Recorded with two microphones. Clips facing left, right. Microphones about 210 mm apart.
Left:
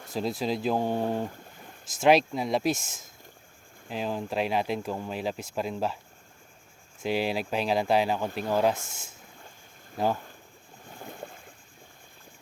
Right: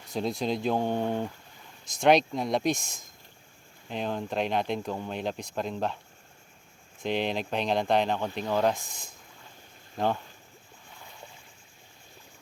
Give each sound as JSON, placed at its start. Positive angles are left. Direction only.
{"t": 0.1, "sound": "speech", "side_deg": 0}
{"t": 7.0, "sound": "speech", "side_deg": 5}
{"t": 11.0, "sound": "boat", "side_deg": 50}